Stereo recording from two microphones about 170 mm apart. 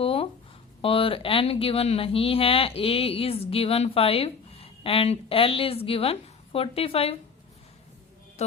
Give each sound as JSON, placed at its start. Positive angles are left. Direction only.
{"t": 0.0, "sound": "a sound", "side_deg": 35}
{"t": 0.8, "sound": "speech", "side_deg": 30}
{"t": 8.4, "sound": "music", "side_deg": 40}